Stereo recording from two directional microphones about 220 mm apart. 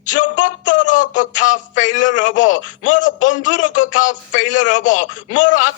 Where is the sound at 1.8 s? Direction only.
35° left (ahead or behind).